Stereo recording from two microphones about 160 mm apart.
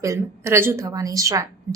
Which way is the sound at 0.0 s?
20° right (ahead or behind).